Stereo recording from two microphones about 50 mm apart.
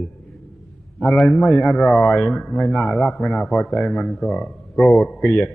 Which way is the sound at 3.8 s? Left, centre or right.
Centre.